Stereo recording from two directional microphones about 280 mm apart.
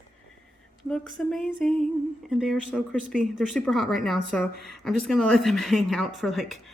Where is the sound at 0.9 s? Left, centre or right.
Centre.